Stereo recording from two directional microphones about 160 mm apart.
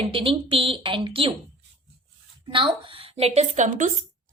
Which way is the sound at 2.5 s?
35° right (ahead or behind).